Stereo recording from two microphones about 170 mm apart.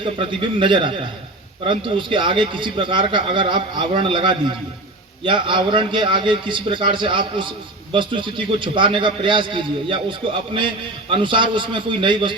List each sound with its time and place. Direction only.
0.0 s a man's voice: 30° right (ahead or behind)